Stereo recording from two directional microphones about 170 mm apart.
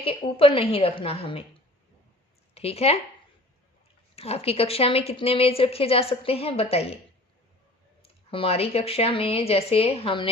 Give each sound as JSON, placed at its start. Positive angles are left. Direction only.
{"t": 0.0, "sound": "a woman's voice", "side_deg": 35}
{"t": 2.6, "sound": "a woman's voice", "side_deg": 35}
{"t": 4.1, "sound": "a woman's voice", "side_deg": 35}
{"t": 8.0, "sound": "a woman's voice", "side_deg": 35}